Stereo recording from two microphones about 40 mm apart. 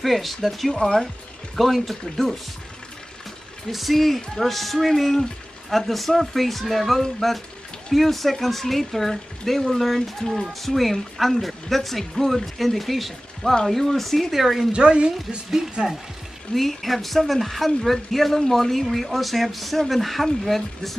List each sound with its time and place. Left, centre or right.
0.0 s speech: centre
3.6 s speech: centre
14.3 s speech: centre
14.6 s speech: right
16.5 s speech: centre